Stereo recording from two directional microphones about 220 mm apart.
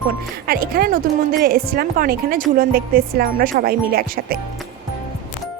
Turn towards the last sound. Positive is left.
turn(degrees=-45)  # may be behind; listen again after turning